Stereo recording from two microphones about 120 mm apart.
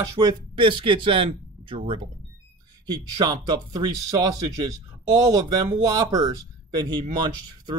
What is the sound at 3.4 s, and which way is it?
Speech, 35° right (ahead or behind).